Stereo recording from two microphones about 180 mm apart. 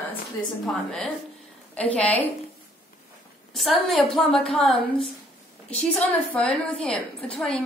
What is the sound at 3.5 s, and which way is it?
A woman's voice, centre (ahead or behind).